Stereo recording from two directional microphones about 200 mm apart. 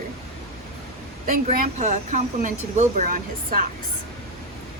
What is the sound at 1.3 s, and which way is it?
Speech, 45° right (ahead or behind).